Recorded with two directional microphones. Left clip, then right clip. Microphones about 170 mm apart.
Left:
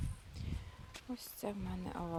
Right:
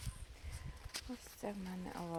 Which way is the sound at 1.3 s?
30° left (ahead or behind).